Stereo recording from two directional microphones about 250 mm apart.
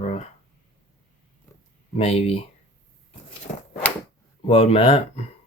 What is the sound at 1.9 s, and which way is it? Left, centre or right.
Speech, left.